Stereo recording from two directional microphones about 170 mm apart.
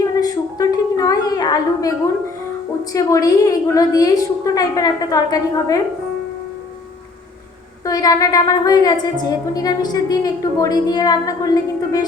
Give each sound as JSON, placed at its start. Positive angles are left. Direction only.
{"t": 0.2, "sound": "a sound", "side_deg": 20}
{"t": 2.9, "sound": "a woman's voice", "side_deg": 20}
{"t": 7.9, "sound": "a woman's voice", "side_deg": 20}